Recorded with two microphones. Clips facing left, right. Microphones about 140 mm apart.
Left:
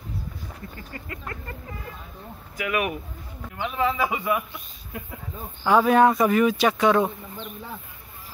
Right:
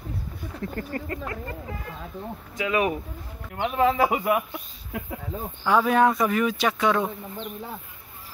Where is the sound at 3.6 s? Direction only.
50° right (ahead or behind).